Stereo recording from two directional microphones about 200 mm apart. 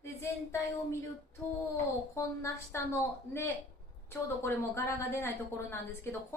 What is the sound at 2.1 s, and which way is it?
A woman's voice, 15° left (ahead or behind).